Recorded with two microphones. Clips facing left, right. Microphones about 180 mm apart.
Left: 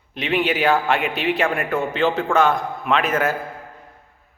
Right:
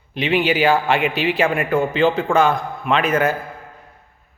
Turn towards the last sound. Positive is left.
turn(degrees=0)  # may be behind; listen again after turning